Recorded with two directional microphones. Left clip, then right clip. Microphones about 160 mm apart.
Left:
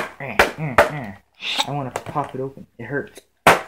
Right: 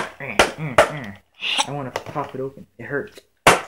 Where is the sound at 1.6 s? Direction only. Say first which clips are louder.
Left 1 dB; 30° left (ahead or behind).